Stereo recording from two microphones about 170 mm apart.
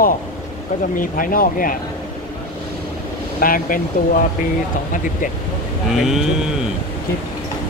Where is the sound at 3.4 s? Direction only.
55° left (ahead or behind).